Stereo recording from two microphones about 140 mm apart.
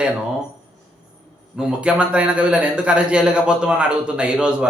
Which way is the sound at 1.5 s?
5° right (ahead or behind).